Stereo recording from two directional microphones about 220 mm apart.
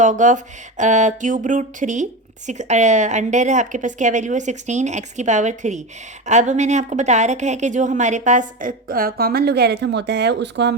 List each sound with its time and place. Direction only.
0.0 s a woman's voice: 35° right (ahead or behind); by 10.8 s 50° right (ahead or behind)